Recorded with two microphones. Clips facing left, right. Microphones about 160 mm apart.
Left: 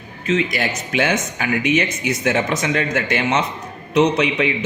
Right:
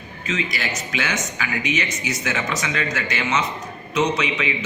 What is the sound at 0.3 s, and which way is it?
Speech, 55° left (ahead or behind).